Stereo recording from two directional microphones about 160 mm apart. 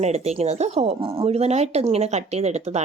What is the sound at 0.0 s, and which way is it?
Speech, 45° right (ahead or behind).